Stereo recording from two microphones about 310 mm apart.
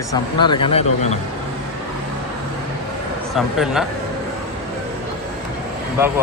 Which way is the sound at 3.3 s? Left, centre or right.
Centre.